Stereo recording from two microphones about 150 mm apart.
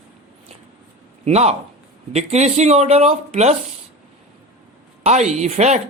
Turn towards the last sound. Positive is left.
turn(degrees=-50)  # may be behind; listen again after turning